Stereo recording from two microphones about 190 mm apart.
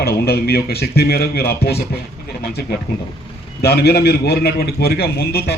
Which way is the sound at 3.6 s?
60° left (ahead or behind).